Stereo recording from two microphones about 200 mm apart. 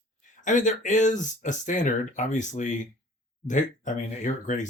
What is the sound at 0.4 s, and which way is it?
Speech, 40° left (ahead or behind).